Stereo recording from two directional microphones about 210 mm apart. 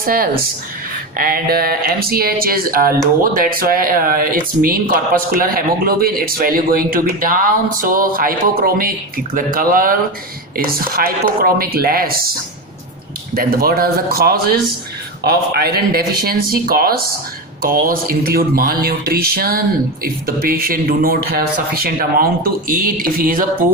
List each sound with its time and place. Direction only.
0.0 s speech: 45° right (ahead or behind)
13.3 s speech: 45° right (ahead or behind)